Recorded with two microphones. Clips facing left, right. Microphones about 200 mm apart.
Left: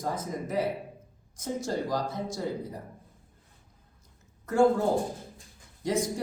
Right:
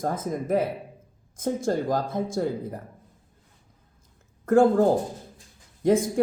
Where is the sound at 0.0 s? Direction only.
50° right (ahead or behind).